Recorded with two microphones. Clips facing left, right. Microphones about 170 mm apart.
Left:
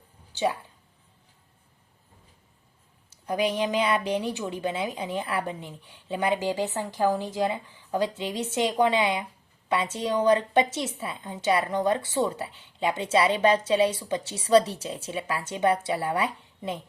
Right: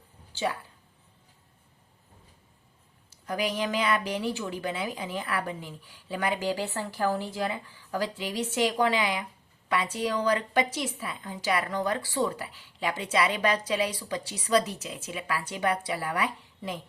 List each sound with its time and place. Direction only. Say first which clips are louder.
0.3 s speech: left 4 dB; 20° left (ahead or behind)
3.2 s a woman's voice: left 4 dB; 20° left (ahead or behind)